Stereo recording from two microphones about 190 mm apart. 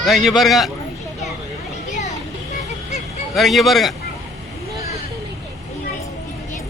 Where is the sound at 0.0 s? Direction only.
Centre (ahead or behind).